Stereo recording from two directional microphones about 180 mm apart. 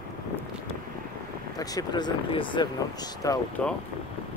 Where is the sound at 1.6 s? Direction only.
20° left (ahead or behind).